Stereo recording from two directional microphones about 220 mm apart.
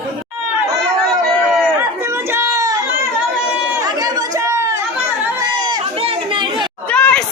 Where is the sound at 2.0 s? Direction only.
10° right (ahead or behind).